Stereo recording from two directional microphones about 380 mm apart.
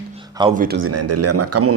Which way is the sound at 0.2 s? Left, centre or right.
Centre.